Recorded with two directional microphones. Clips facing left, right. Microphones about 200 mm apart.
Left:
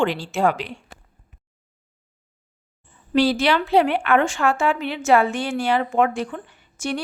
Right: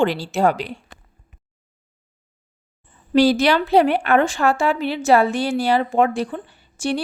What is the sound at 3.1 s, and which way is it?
A woman's voice, 40° right (ahead or behind).